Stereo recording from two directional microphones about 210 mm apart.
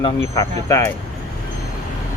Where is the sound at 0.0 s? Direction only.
15° left (ahead or behind).